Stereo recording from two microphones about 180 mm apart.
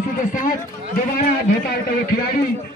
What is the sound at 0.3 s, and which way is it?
A man's voice, 50° left (ahead or behind).